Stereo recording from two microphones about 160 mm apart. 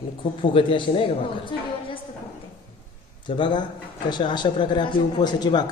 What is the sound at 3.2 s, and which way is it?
A man's voice, 30° left (ahead or behind).